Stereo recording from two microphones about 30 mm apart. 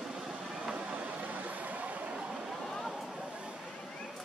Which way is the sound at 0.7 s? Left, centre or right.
Right.